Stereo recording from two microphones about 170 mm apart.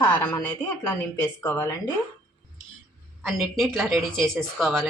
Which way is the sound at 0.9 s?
10° left (ahead or behind).